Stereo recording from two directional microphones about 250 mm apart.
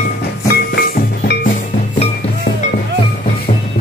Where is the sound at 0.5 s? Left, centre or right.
Left.